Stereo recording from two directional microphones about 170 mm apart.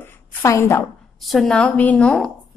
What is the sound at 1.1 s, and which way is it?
A woman's voice, centre (ahead or behind).